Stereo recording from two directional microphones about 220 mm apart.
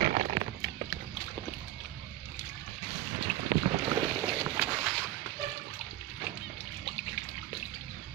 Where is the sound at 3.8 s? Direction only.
15° right (ahead or behind).